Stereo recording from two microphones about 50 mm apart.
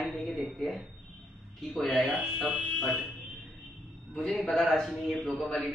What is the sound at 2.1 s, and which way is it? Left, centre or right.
Speech, centre.